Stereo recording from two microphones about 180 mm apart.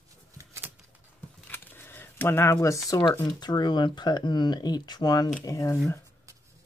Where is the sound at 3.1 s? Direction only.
20° left (ahead or behind).